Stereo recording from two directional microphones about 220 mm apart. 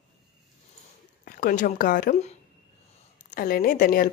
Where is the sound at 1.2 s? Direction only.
40° left (ahead or behind).